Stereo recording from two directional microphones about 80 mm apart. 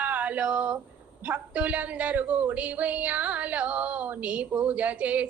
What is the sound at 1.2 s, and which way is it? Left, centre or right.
Music, centre.